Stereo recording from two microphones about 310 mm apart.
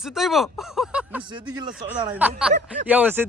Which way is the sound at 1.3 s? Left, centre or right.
Centre.